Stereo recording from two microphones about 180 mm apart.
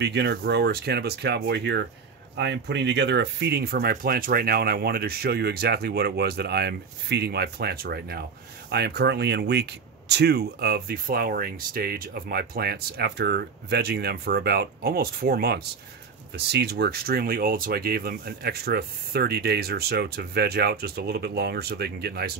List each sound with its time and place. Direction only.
0.0 s speech: 70° right (ahead or behind); by 8.2 s 55° right (ahead or behind)
8.6 s speech: 65° right (ahead or behind)